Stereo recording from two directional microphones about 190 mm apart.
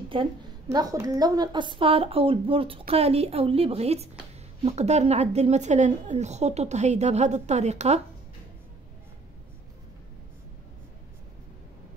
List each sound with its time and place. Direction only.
0.1 s a woman's voice: 25° right (ahead or behind)